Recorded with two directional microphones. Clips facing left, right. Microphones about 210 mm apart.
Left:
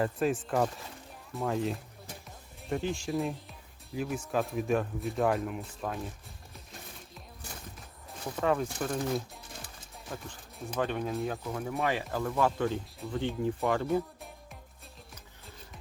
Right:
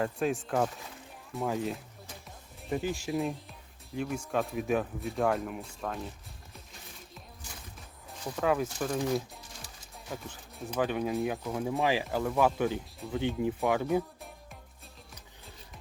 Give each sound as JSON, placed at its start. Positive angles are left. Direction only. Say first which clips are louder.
{"t": 0.0, "sound": "speech", "louder": "left 1 dB", "side_deg": 0}
{"t": 8.4, "sound": "speech", "louder": "even", "side_deg": -5}
{"t": 11.6, "sound": "speech", "louder": "right 3 dB", "side_deg": -15}
{"t": 12.0, "sound": "speech", "louder": "right 2 dB", "side_deg": -5}